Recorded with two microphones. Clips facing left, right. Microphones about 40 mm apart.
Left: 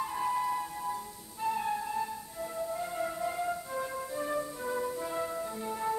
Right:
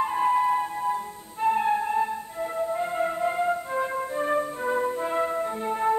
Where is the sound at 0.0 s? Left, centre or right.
Right.